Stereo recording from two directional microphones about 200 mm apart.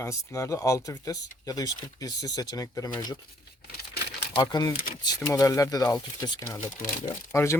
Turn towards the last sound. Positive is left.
turn(degrees=15)  # may be behind; listen again after turning